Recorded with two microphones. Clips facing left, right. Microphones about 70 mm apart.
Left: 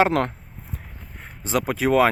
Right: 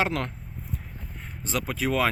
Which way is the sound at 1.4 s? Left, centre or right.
Centre.